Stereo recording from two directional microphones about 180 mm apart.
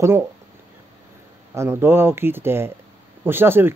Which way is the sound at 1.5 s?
15° right (ahead or behind).